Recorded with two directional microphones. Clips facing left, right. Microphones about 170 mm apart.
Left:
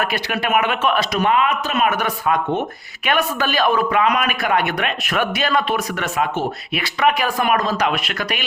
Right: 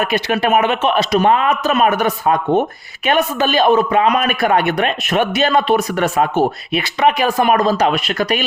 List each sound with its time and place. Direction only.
0.0 s a man's voice: 25° right (ahead or behind)
2.0 s a man's voice: 30° right (ahead or behind)